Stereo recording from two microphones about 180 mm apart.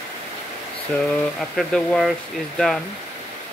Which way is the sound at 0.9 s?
5° left (ahead or behind).